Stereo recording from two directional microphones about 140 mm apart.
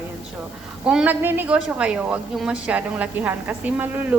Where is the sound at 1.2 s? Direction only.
15° right (ahead or behind).